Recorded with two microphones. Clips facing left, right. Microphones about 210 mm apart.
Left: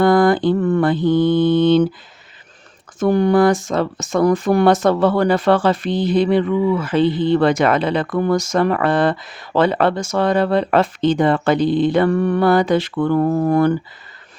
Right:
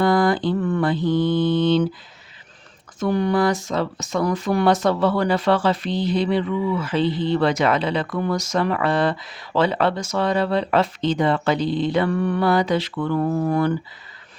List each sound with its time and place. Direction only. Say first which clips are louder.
0.0 s mantra: left 5 dB; 55° left (ahead or behind)
3.0 s speech: left 6 dB; 45° left (ahead or behind)